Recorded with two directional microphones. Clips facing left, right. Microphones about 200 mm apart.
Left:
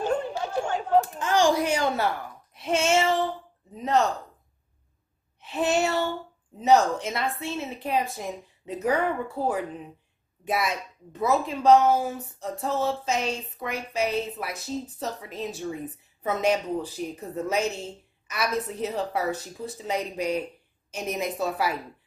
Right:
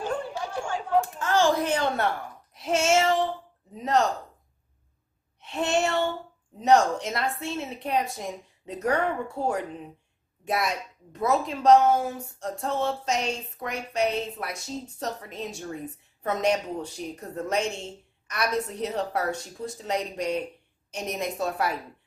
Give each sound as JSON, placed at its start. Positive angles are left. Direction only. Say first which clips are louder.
{"t": 0.6, "sound": "chatter", "louder": "left 4 dB", "side_deg": 40}
{"t": 1.2, "sound": "a child's voice", "louder": "left 1 dB", "side_deg": 15}
{"t": 5.4, "sound": "speech", "louder": "left 1 dB", "side_deg": 0}